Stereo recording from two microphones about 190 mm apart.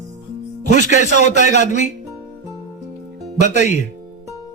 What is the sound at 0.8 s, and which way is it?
Speech, 40° left (ahead or behind).